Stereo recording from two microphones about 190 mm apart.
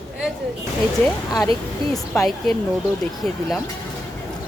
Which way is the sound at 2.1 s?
5° left (ahead or behind).